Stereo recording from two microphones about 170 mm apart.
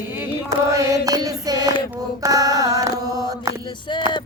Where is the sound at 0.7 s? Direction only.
20° right (ahead or behind).